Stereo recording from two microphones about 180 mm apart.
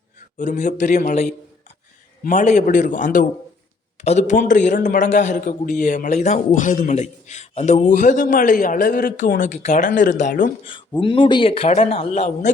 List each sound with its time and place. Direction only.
0.3 s a man's voice: 45° left (ahead or behind)
10.7 s a man's voice: 30° left (ahead or behind)